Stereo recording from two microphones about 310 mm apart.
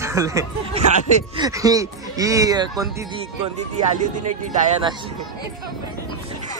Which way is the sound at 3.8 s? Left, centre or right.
Right.